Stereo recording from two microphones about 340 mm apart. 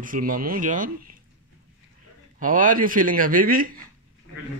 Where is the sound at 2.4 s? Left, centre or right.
Right.